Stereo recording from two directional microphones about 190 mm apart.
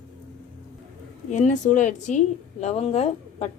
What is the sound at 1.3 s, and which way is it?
A woman's voice, 40° left (ahead or behind).